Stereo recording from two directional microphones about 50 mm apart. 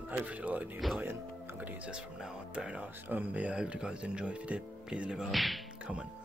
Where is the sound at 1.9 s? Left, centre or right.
Right.